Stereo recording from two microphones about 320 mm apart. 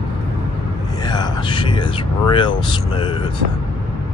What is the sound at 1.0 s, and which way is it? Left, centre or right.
Speech, centre.